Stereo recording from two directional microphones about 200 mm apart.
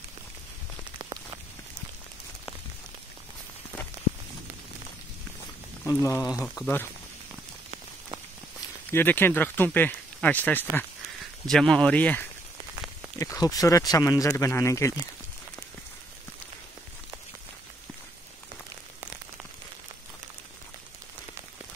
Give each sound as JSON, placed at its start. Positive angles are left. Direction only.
{"t": 5.9, "sound": "speech", "side_deg": 15}
{"t": 8.9, "sound": "speech", "side_deg": 10}
{"t": 13.2, "sound": "speech", "side_deg": 15}